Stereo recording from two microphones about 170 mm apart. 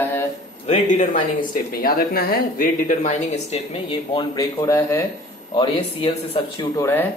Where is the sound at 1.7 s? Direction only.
60° left (ahead or behind); by 5.0 s 20° left (ahead or behind).